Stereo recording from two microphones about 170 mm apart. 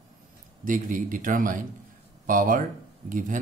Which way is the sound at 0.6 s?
50° right (ahead or behind).